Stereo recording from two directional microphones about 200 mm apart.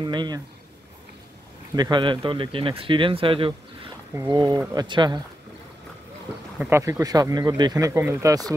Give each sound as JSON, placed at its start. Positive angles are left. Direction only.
{"t": 0.0, "sound": "speech", "side_deg": -20}
{"t": 1.8, "sound": "speech", "side_deg": -25}
{"t": 6.6, "sound": "speech", "side_deg": -15}